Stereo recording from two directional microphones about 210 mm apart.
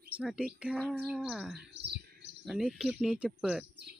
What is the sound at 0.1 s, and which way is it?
A woman's voice, 5° right (ahead or behind).